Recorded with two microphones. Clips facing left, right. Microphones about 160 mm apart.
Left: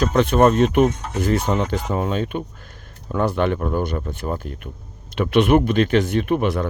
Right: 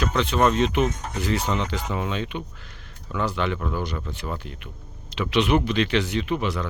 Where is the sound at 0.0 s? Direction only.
45° left (ahead or behind).